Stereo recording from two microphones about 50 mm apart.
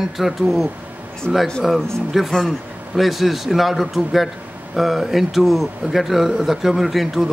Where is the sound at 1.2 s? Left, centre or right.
Centre.